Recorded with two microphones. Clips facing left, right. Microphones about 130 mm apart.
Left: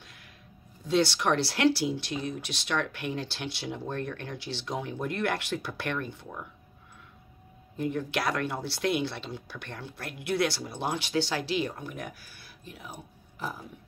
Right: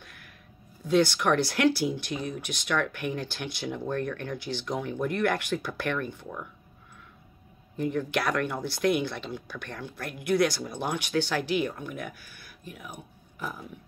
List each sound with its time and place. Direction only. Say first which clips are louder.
0.8 s speech: right 2 dB; 25° left (ahead or behind)
7.7 s speech: right 2 dB; 20° left (ahead or behind)